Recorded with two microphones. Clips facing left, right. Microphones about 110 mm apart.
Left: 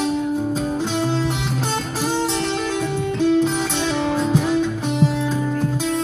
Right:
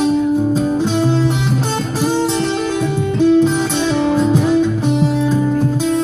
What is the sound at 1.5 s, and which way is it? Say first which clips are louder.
Music: right 5 dB; 20° right (ahead or behind).